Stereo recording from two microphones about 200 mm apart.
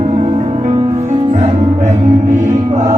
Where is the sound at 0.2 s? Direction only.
35° right (ahead or behind).